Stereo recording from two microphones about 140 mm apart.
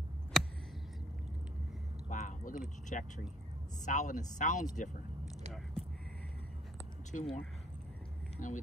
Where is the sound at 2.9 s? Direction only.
60° left (ahead or behind).